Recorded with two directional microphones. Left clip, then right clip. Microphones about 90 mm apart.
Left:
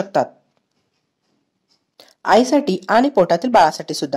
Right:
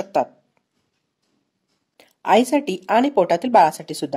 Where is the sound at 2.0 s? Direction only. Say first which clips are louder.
Left 2 dB; 20° left (ahead or behind).